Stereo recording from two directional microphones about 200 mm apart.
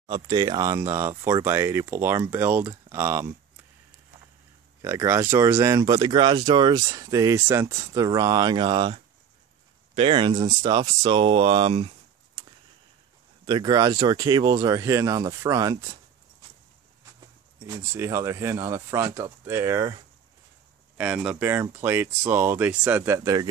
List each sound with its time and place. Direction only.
0.0 s speech: 20° right (ahead or behind)
4.8 s speech: 15° right (ahead or behind)
13.5 s speech: 20° right (ahead or behind)
17.6 s speech: 15° right (ahead or behind)
21.0 s speech: 5° right (ahead or behind)